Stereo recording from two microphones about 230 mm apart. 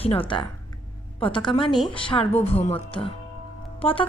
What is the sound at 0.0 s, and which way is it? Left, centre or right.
A woman's voice, left.